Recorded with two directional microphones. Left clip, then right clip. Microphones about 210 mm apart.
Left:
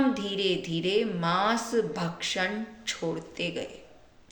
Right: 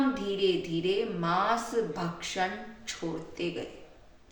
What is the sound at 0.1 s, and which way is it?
A woman's voice, 45° left (ahead or behind).